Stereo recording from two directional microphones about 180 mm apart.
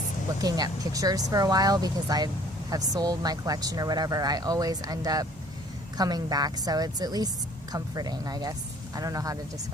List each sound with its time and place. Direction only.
0.4 s speech: 20° right (ahead or behind)